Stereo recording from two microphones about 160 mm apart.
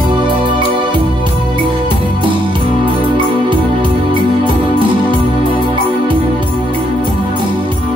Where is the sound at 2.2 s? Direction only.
30° right (ahead or behind).